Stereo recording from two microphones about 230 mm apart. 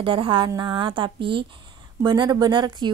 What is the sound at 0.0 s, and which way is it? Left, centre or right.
A woman's voice, right.